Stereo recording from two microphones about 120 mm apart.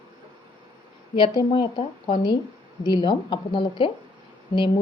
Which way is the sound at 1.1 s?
40° left (ahead or behind).